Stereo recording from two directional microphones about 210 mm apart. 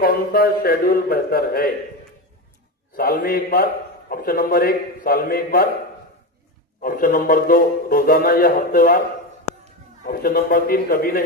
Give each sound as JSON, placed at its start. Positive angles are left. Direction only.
{"t": 0.0, "sound": "a man's voice", "side_deg": 45}
{"t": 2.9, "sound": "a man's voice", "side_deg": 45}
{"t": 6.8, "sound": "a man's voice", "side_deg": 40}